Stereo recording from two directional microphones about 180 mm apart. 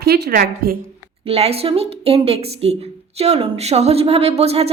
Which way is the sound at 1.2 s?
35° right (ahead or behind).